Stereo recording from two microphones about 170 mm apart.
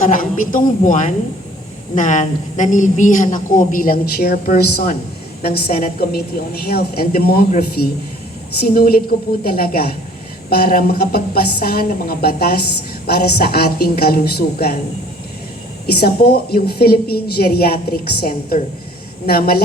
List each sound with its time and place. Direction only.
0.0 s a woman's voice: 55° left (ahead or behind)
15.9 s a woman's voice: 70° left (ahead or behind)